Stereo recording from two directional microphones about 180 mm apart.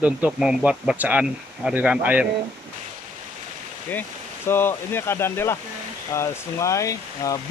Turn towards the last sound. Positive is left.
turn(degrees=20)  # may be behind; listen again after turning